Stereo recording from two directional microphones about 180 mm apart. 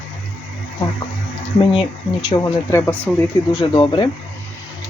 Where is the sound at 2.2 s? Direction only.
20° left (ahead or behind).